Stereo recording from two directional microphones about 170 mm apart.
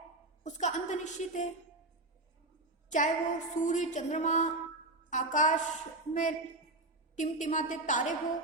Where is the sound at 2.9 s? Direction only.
45° left (ahead or behind).